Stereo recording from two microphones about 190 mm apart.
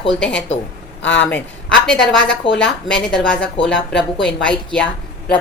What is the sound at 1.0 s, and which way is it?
Speech, 75° left (ahead or behind).